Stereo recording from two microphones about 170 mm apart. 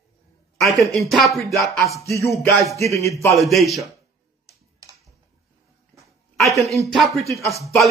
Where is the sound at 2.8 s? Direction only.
15° left (ahead or behind).